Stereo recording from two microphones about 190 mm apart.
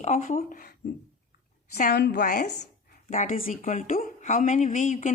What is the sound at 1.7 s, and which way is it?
A woman's voice, 45° left (ahead or behind).